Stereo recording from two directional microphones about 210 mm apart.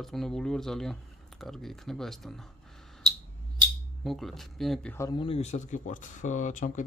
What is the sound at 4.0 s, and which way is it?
Speech, centre (ahead or behind).